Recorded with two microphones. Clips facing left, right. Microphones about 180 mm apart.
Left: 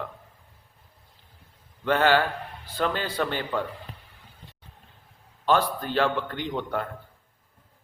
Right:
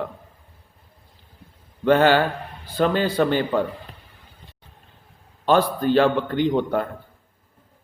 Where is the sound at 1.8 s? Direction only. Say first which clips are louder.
Right 5 dB; 25° right (ahead or behind).